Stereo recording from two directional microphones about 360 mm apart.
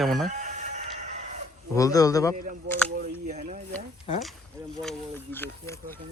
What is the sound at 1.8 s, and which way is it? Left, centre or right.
Speech, centre.